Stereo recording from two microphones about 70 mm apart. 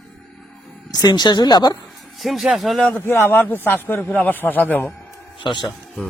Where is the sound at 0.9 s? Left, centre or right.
Left.